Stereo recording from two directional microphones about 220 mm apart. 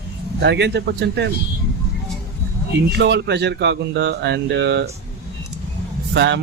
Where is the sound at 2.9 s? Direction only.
50° right (ahead or behind).